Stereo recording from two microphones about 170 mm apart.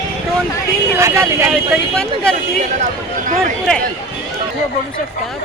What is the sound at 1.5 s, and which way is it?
Speech, 5° left (ahead or behind).